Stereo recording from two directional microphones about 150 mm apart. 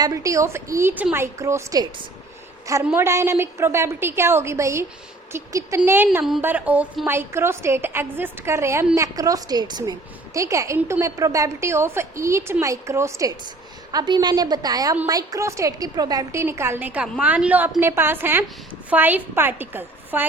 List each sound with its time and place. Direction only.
0.0 s a woman's voice: 20° right (ahead or behind)